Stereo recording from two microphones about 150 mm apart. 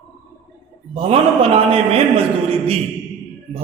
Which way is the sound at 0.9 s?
40° right (ahead or behind).